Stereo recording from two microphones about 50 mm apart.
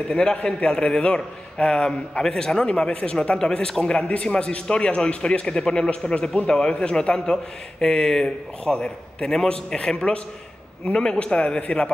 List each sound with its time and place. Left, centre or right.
0.1 s a man's voice: centre